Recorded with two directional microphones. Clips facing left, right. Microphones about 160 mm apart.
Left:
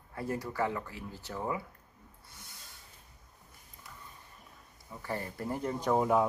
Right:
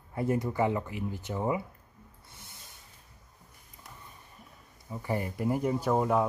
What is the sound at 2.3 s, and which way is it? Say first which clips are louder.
Owl: right 2 dB; 25° right (ahead or behind).